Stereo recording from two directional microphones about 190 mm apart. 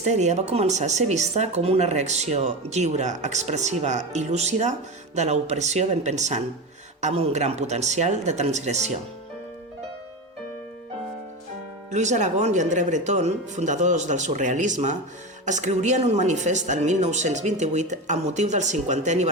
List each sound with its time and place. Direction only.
0.0 s speech: 35° right (ahead or behind)
11.9 s speech: 40° right (ahead or behind)